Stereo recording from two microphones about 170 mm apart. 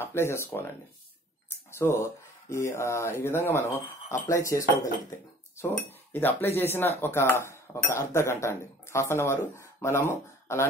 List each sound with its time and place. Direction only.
0.0 s speech: 15° left (ahead or behind)
1.7 s speech: 15° left (ahead or behind)
4.3 s cutlery: 20° left (ahead or behind)
5.6 s speech: 10° left (ahead or behind)